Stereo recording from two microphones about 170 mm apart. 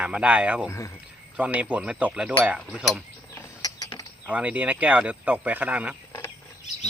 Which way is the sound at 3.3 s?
20° left (ahead or behind).